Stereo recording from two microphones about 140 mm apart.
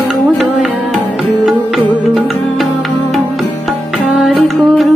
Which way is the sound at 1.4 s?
Centre (ahead or behind).